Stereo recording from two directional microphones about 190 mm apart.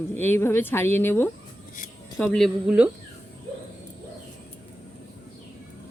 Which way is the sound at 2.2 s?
Centre (ahead or behind).